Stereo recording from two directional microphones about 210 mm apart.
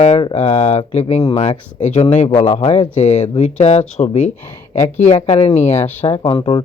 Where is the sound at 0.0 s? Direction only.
25° left (ahead or behind).